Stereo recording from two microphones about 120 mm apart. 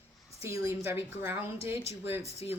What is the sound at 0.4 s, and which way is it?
Speech, 25° right (ahead or behind).